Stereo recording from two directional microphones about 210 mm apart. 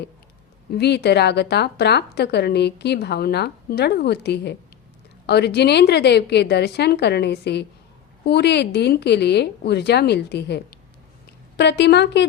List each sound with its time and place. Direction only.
0.7 s a woman's voice: 50° left (ahead or behind)